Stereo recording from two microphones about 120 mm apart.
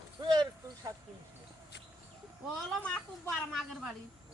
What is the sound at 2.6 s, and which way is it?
A woman's voice, 5° left (ahead or behind).